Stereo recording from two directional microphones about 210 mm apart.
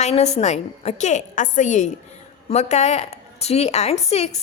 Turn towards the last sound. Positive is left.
turn(degrees=30)  # may be behind; listen again after turning